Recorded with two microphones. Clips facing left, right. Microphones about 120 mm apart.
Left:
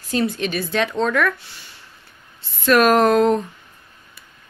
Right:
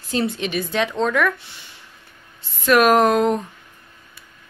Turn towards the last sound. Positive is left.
turn(degrees=-10)  # may be behind; listen again after turning